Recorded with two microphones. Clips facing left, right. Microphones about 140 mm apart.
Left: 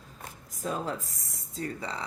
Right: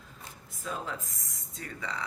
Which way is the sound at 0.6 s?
40° left (ahead or behind).